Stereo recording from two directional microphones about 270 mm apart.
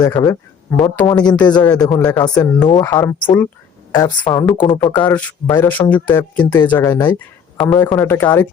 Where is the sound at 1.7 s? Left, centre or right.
Centre.